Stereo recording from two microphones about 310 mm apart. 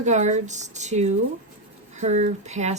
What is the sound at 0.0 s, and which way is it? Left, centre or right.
Speech, right.